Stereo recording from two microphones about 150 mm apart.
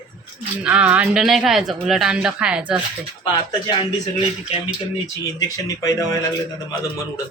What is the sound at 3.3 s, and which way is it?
Speech, 30° left (ahead or behind).